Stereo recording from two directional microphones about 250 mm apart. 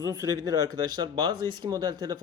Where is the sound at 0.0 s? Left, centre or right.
Centre.